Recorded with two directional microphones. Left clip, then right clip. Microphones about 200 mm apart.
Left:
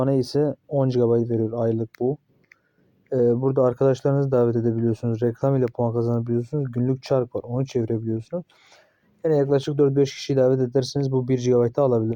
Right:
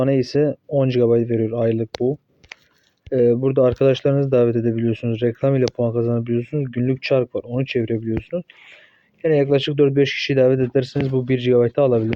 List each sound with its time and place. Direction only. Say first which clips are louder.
0.0 s speech: right 4 dB; centre (ahead or behind)
3.2 s speech: right 4 dB; centre (ahead or behind)
4.5 s speech: right 3 dB; 15° right (ahead or behind)
4.9 s speech: right 3 dB; centre (ahead or behind)
9.6 s speech: right 3 dB; centre (ahead or behind)
10.8 s speech: right 3 dB; 20° right (ahead or behind)
11.1 s speech: right 2 dB; 5° left (ahead or behind)
11.3 s speech: right 4 dB; 15° right (ahead or behind)
11.6 s speech: right 3 dB; 5° left (ahead or behind)